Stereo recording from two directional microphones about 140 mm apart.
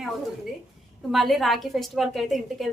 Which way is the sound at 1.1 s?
Centre (ahead or behind).